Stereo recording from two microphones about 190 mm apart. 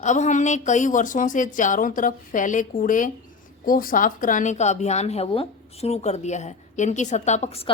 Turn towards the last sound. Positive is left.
turn(degrees=30)  # may be behind; listen again after turning